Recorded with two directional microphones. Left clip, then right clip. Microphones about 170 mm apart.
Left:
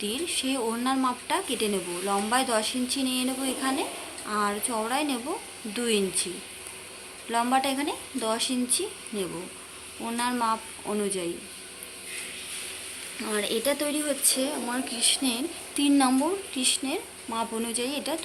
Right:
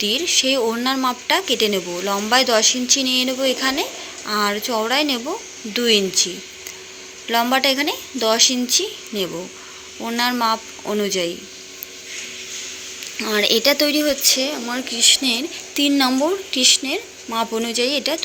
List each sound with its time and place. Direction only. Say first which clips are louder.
0.0 s speech: right 12 dB; 25° right (ahead or behind)
7.3 s speech: right 8 dB; 25° right (ahead or behind)
13.2 s speech: right 11 dB; 25° right (ahead or behind)